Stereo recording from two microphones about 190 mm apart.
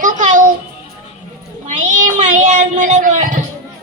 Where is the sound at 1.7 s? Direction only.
40° right (ahead or behind).